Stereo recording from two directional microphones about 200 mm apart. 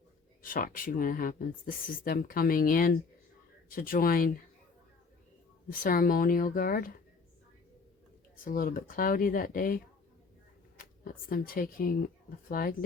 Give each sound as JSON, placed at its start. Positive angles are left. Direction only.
{"t": 0.4, "sound": "speech", "side_deg": 45}
{"t": 5.6, "sound": "speech", "side_deg": 45}
{"t": 8.4, "sound": "speech", "side_deg": 45}